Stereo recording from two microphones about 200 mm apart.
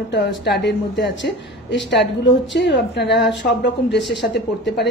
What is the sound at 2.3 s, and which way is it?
Speech, 65° left (ahead or behind).